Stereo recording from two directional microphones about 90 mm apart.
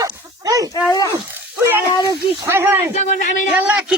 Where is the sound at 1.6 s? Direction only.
25° right (ahead or behind).